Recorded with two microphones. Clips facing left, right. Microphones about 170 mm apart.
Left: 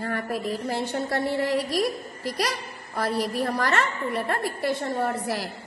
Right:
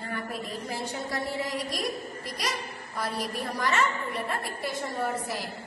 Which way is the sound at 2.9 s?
60° left (ahead or behind).